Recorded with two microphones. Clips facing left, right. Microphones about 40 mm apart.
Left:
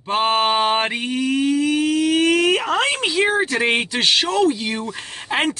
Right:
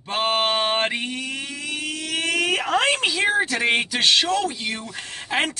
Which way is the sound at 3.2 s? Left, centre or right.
Centre.